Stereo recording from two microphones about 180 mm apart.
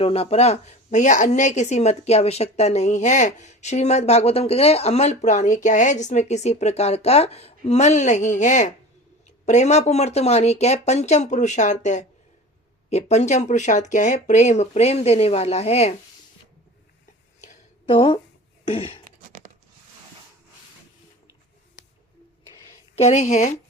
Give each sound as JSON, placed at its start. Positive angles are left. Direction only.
{"t": 0.0, "sound": "speech", "side_deg": 35}
{"t": 17.8, "sound": "speech", "side_deg": 30}
{"t": 18.6, "sound": "throat clearing", "side_deg": 30}
{"t": 23.0, "sound": "speech", "side_deg": 40}